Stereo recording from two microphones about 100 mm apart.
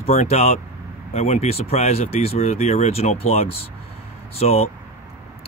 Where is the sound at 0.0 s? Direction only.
90° left.